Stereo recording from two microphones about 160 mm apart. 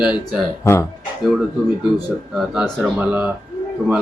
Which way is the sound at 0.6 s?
20° left (ahead or behind).